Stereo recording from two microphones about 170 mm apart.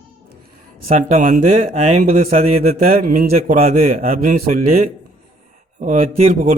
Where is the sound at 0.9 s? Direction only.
50° right (ahead or behind).